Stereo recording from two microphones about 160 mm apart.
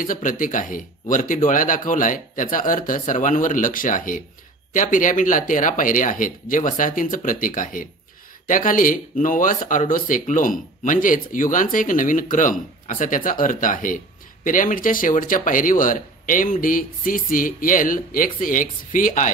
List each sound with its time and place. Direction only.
0.0 s speech: 55° left (ahead or behind)